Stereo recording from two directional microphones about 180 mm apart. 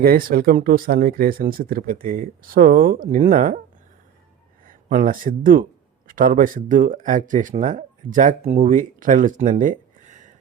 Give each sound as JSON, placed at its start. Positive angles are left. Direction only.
{"t": 0.0, "sound": "speech", "side_deg": -55}
{"t": 4.6, "sound": "speech", "side_deg": -45}